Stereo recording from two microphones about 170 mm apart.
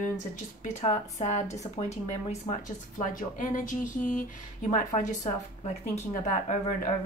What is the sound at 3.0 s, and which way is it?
Speech, 50° left (ahead or behind).